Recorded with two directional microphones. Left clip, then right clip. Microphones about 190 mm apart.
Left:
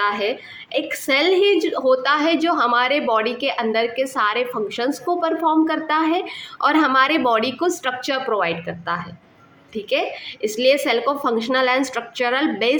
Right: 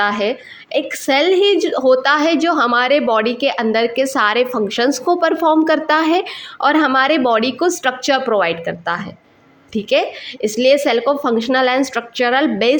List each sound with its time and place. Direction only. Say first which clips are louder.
0.0 s a woman's voice: right 4 dB; 30° right (ahead or behind)